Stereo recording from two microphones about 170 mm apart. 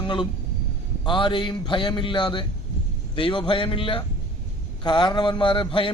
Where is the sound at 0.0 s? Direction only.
30° left (ahead or behind).